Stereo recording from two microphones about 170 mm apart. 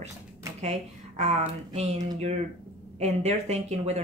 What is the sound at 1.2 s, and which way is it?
Speech, 40° right (ahead or behind).